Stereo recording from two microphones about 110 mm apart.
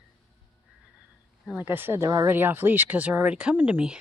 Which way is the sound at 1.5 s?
20° right (ahead or behind).